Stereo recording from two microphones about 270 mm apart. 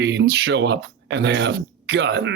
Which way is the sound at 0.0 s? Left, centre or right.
Right.